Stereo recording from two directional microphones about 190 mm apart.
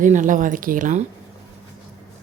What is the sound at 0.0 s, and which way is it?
A woman's voice, 45° right (ahead or behind).